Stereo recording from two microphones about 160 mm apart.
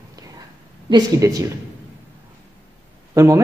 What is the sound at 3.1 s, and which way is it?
Speech, 20° right (ahead or behind).